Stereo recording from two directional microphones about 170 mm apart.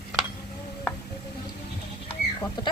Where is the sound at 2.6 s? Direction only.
25° left (ahead or behind).